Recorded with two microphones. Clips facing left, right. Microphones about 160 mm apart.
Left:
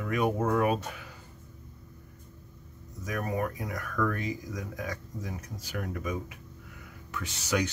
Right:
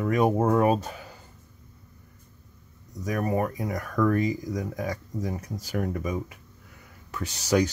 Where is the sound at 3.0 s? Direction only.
40° right (ahead or behind).